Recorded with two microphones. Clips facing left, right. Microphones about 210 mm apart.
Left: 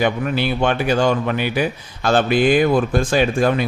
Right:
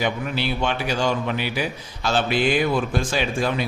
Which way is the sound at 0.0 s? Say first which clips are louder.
Left 5 dB; 55° left (ahead or behind).